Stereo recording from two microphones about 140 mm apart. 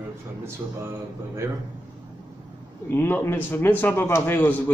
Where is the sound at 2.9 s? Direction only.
15° left (ahead or behind).